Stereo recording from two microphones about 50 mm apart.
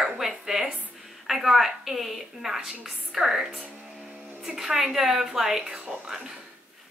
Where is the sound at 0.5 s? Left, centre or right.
Centre.